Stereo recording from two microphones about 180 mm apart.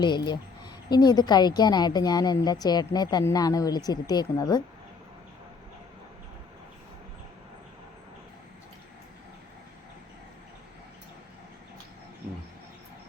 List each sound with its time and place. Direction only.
0.0 s a woman's voice: 25° left (ahead or behind)